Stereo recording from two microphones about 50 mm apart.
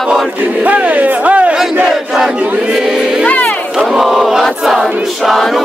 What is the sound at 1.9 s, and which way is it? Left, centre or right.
Battle cry, centre.